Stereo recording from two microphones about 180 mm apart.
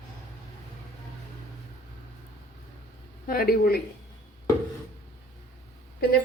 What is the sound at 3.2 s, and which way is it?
Speech, 55° left (ahead or behind).